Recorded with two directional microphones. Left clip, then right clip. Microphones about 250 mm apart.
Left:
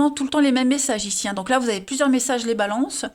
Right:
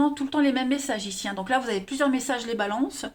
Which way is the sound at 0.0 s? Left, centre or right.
Left.